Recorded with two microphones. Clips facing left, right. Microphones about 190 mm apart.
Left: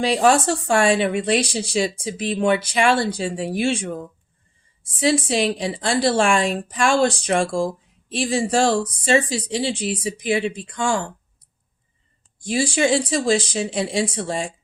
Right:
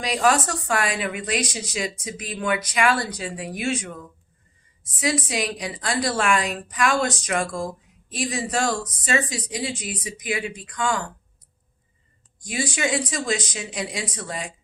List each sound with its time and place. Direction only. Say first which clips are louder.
0.0 s speech: left 4 dB; 30° left (ahead or behind)
12.4 s speech: left 6 dB; 30° left (ahead or behind)